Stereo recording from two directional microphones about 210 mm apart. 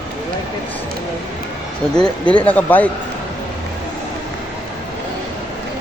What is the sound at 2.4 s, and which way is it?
Speech, 10° left (ahead or behind).